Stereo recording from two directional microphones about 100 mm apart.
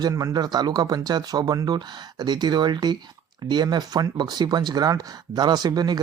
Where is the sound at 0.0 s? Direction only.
40° right (ahead or behind).